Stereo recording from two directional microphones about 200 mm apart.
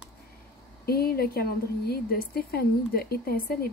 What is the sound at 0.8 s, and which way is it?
A woman's voice, 50° left (ahead or behind).